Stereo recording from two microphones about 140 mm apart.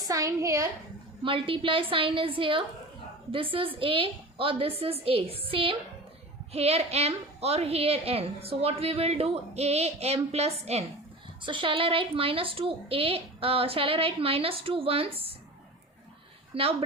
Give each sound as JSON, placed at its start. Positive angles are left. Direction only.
{"t": 0.0, "sound": "a child's voice", "side_deg": -25}
{"t": 1.2, "sound": "a woman's voice", "side_deg": -40}
{"t": 11.4, "sound": "a woman's voice", "side_deg": -35}
{"t": 16.5, "sound": "a woman's voice", "side_deg": -45}